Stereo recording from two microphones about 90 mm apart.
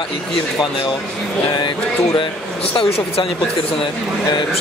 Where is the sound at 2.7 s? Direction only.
85° left.